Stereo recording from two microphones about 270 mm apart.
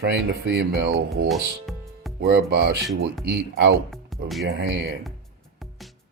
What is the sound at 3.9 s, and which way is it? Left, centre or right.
Music, centre.